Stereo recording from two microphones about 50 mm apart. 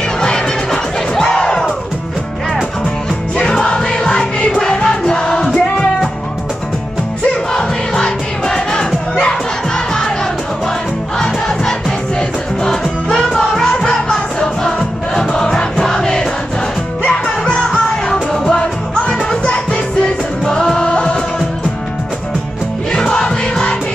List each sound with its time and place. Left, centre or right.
0.2 s crowd: centre
3.3 s music: centre
7.5 s crowd: centre
11.1 s crowd: centre
12.2 s music: centre
22.9 s music: centre